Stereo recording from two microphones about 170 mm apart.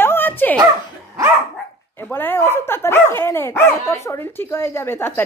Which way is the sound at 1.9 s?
10° left (ahead or behind).